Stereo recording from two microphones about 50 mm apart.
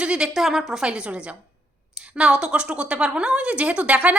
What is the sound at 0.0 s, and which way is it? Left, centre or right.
Speech, centre.